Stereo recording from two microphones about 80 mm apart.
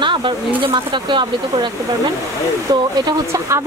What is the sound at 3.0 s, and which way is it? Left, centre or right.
Speech, right.